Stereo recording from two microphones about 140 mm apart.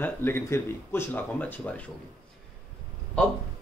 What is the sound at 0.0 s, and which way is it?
Speech, 15° left (ahead or behind).